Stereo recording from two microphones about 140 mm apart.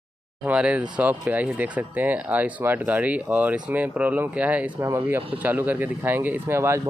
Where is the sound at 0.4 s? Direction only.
10° right (ahead or behind).